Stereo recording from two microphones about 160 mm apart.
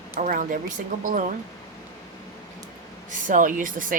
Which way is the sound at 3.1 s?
55° right (ahead or behind).